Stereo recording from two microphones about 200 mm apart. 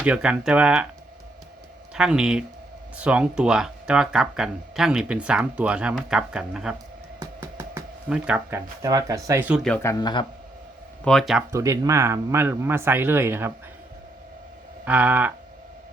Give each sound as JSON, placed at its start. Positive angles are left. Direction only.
{"t": 0.0, "sound": "speech", "side_deg": -5}
{"t": 1.9, "sound": "speech", "side_deg": -5}
{"t": 9.6, "sound": "speech", "side_deg": 5}
{"t": 10.0, "sound": "a man's voice", "side_deg": 20}
{"t": 11.0, "sound": "speech", "side_deg": 0}
{"t": 11.5, "sound": "speech", "side_deg": -15}
{"t": 14.8, "sound": "speech", "side_deg": -5}